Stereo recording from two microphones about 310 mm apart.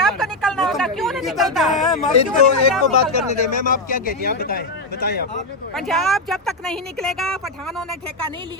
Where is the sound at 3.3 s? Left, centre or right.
Left.